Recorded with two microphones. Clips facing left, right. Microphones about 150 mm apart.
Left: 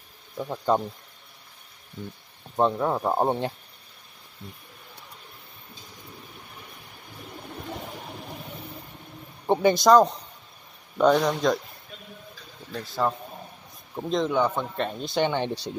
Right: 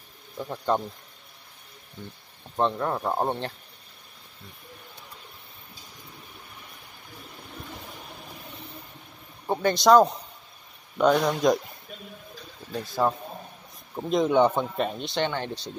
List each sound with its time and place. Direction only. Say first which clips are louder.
0.4 s speech: left 2 dB; 10° left (ahead or behind)
2.5 s speech: left 2 dB; 10° left (ahead or behind)
9.5 s speech: left 4 dB; 15° left (ahead or behind)
9.8 s speech: right 2 dB; 5° right (ahead or behind)
12.7 s speech: right 1 dB; 10° right (ahead or behind)
14.3 s a man's voice: right 4 dB; 20° right (ahead or behind)
14.8 s speech: right 1 dB; 5° right (ahead or behind)
15.0 s speech: left 3 dB; 10° left (ahead or behind)